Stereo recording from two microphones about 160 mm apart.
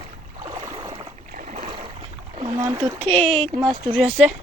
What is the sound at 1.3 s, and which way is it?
Boat, 45° right (ahead or behind).